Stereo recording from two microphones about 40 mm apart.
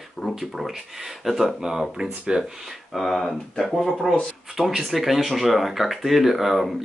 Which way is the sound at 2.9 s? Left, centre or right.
Centre.